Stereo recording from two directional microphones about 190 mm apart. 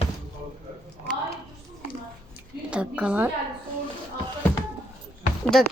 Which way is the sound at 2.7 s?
5° right (ahead or behind).